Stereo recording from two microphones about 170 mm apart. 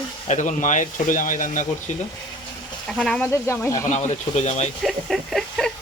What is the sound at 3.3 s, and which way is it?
Speech, 15° left (ahead or behind).